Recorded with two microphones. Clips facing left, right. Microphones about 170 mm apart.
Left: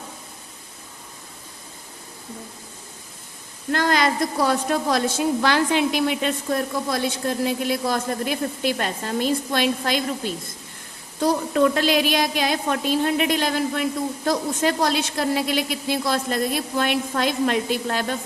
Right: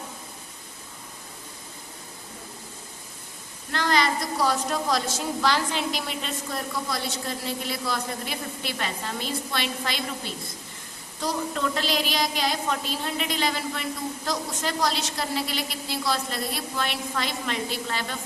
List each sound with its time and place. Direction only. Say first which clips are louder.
3.7 s a woman's voice: left 4 dB; 50° left (ahead or behind)
11.2 s a woman's voice: left 9 dB; 55° left (ahead or behind)